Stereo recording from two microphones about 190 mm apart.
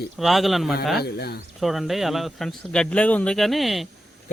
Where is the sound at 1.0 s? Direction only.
60° left (ahead or behind).